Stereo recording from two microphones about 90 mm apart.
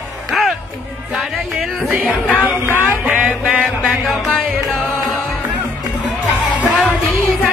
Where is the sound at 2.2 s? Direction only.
20° left (ahead or behind).